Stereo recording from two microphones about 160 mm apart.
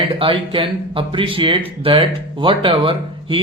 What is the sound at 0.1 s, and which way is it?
Speech, 35° right (ahead or behind).